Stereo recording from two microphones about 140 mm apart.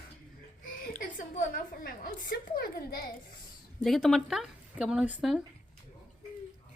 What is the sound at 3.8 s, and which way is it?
Speech, centre (ahead or behind).